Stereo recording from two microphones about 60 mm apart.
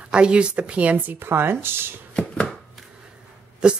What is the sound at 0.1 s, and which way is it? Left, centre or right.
Speech, centre.